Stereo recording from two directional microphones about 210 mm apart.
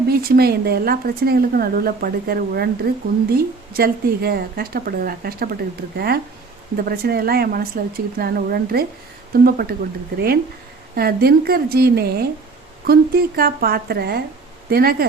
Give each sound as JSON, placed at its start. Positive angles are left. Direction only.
{"t": 0.1, "sound": "speech", "side_deg": -45}
{"t": 6.8, "sound": "speech", "side_deg": -45}